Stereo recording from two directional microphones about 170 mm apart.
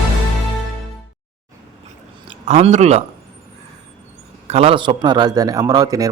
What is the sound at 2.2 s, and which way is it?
Speech, 35° right (ahead or behind).